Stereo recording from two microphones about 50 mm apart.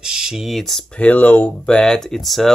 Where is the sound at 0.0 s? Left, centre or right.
Centre.